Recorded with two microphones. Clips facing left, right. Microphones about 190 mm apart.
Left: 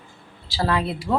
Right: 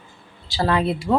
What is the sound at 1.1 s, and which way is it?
Speech, 15° right (ahead or behind).